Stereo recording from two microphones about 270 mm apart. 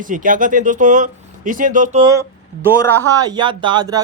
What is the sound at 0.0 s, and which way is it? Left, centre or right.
Speech, right.